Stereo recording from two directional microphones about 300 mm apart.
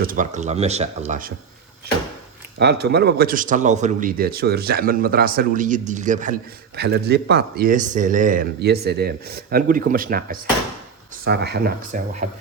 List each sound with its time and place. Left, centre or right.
0.0 s a man's voice: right
2.6 s a man's voice: right